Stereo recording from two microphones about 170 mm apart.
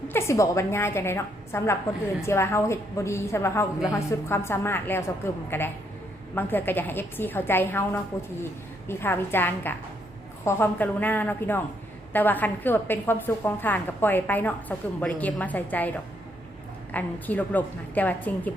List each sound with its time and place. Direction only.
0.1 s a woman's voice: 15° left (ahead or behind)
8.9 s a woman's voice: 15° left (ahead or behind)
16.9 s a woman's voice: 10° left (ahead or behind)